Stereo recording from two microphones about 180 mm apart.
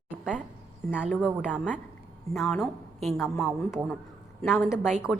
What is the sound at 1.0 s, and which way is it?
A woman's voice, 5° right (ahead or behind).